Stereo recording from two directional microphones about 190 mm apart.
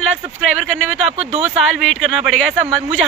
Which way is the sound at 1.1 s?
35° right (ahead or behind).